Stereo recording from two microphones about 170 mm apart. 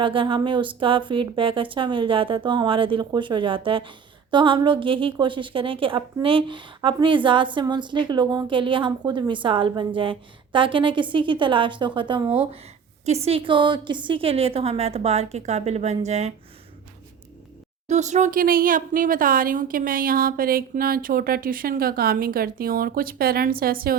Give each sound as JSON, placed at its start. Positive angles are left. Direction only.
{"t": 0.0, "sound": "a woman's voice", "side_deg": -30}
{"t": 17.8, "sound": "speech", "side_deg": -45}